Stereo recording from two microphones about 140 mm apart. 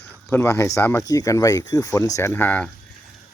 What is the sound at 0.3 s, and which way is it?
Speech, 15° left (ahead or behind).